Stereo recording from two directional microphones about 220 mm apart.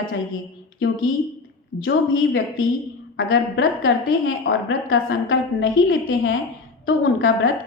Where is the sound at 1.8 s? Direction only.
60° left (ahead or behind).